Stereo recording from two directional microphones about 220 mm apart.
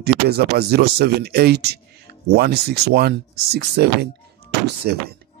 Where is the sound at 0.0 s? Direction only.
45° right (ahead or behind).